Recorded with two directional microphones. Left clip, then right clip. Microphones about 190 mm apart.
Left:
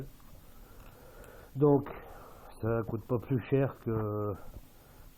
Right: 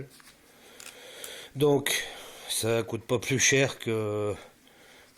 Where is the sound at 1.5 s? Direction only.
25° right (ahead or behind).